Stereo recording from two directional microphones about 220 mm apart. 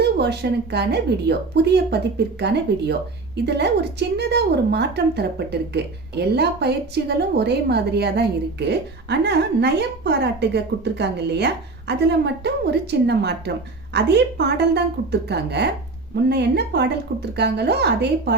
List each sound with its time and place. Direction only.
0.0 s a woman's voice: 50° right (ahead or behind)